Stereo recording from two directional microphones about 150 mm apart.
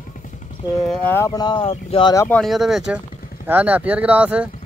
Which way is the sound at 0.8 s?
15° left (ahead or behind).